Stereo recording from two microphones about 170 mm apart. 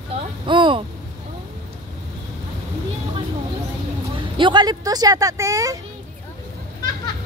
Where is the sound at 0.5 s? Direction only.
30° right (ahead or behind).